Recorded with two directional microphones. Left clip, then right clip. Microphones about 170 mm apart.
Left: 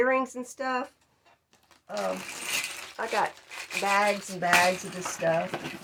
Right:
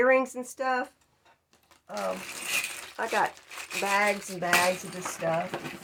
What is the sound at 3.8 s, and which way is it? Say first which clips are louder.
Speech: left 1 dB; 25° right (ahead or behind).